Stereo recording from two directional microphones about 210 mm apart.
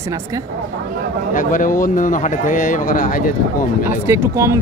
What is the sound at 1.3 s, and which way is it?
Speech, 40° left (ahead or behind).